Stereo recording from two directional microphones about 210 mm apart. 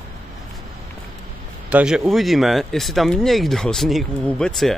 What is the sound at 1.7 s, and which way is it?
Speech, 5° right (ahead or behind).